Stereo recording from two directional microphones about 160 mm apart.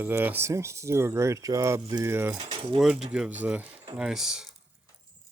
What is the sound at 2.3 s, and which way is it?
Speech, 30° right (ahead or behind).